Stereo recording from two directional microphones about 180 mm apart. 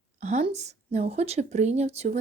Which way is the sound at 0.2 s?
40° right (ahead or behind).